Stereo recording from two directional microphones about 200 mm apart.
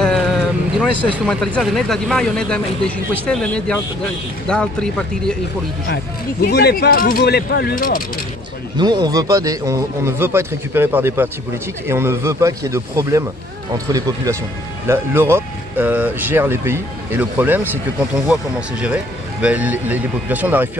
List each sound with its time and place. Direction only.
0.0 s vehicle: centre (ahead or behind)
1.1 s speech: centre (ahead or behind)
6.4 s speech: 50° left (ahead or behind)
8.7 s speech: 20° right (ahead or behind)